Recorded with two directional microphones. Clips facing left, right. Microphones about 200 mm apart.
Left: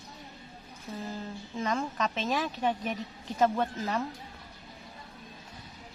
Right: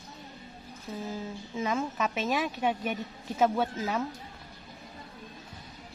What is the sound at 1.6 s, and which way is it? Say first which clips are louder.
A woman's voice: right 1 dB; 5° right (ahead or behind).